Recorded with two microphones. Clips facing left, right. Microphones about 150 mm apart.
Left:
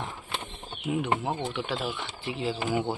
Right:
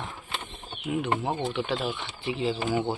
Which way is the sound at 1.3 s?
10° right (ahead or behind).